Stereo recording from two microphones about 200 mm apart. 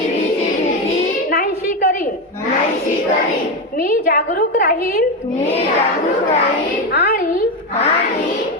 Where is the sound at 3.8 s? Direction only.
45° left (ahead or behind).